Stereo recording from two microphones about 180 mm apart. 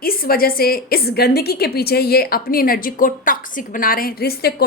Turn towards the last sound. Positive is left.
turn(degrees=60)  # may be behind; listen again after turning